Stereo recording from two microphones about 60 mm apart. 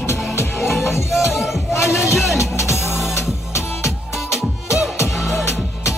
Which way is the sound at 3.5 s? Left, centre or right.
Left.